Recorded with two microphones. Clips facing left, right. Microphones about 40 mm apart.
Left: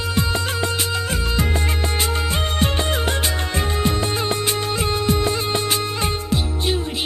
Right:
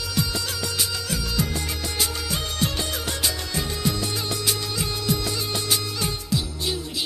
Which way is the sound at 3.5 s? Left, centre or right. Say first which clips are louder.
Left 7 dB; left.